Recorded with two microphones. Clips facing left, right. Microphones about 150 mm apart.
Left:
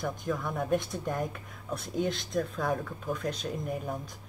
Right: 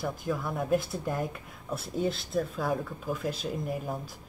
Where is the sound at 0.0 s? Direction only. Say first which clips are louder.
Right 1 dB; 5° right (ahead or behind).